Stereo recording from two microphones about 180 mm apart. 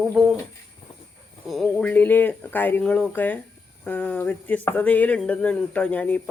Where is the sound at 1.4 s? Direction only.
Centre (ahead or behind).